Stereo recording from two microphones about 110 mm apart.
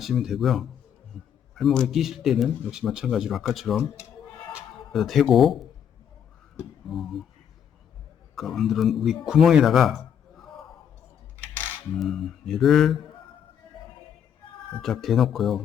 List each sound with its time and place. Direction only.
0.0 s a man's voice: centre (ahead or behind)
4.9 s a man's voice: centre (ahead or behind)
6.8 s a man's voice: centre (ahead or behind)
8.4 s a man's voice: centre (ahead or behind)
11.9 s a man's voice: centre (ahead or behind)
14.8 s a man's voice: centre (ahead or behind)